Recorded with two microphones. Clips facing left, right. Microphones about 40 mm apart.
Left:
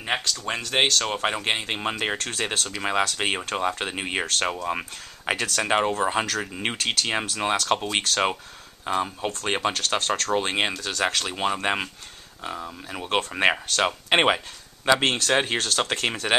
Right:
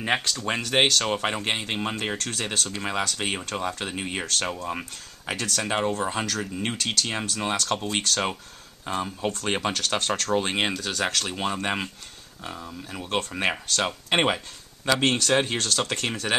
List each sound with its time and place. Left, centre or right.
0.0 s speech: centre; by 4.3 s left
4.3 s speech: centre
12.6 s speech: left
15.8 s speech: left